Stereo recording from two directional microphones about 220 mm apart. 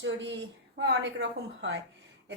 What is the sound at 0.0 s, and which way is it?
A woman's voice, 50° right (ahead or behind).